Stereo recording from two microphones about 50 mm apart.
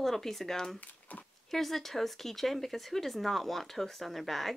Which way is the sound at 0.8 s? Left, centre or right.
Left.